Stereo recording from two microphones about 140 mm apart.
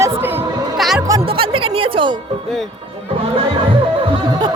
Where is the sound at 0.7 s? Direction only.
Centre (ahead or behind).